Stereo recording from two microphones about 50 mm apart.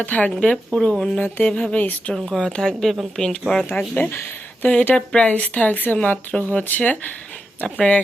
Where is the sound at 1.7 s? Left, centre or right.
Left.